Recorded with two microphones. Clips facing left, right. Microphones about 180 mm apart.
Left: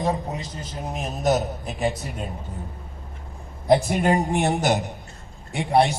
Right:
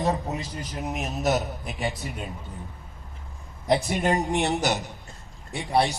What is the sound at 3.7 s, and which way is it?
A man's voice, 40° left (ahead or behind).